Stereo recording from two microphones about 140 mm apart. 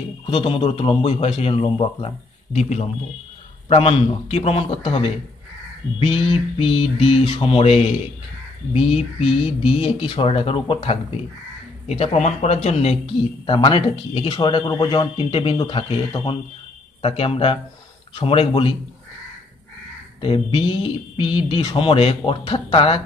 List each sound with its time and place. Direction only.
0.3 s speech: 40° left (ahead or behind)
5.9 s mantra: 45° left (ahead or behind)
8.7 s speech: 45° left (ahead or behind)
20.2 s speech: 35° left (ahead or behind)